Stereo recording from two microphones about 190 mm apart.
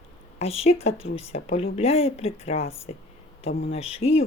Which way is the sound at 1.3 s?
35° left (ahead or behind).